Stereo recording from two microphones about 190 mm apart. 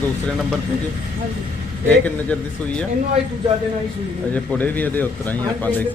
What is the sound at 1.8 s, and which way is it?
A man's voice, 5° left (ahead or behind).